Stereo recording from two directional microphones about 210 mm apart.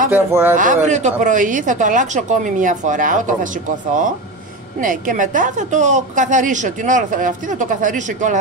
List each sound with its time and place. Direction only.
0.1 s speech: 10° right (ahead or behind)
0.6 s a woman's voice: 35° right (ahead or behind)
4.8 s a woman's voice: 40° right (ahead or behind)